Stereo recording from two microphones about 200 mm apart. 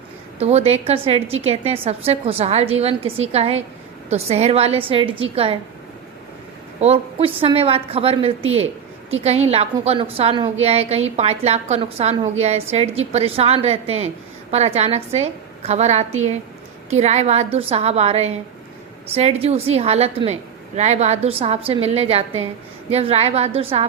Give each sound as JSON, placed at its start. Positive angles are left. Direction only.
{"t": 0.3, "sound": "a woman's voice", "side_deg": -30}
{"t": 6.7, "sound": "a woman's voice", "side_deg": -30}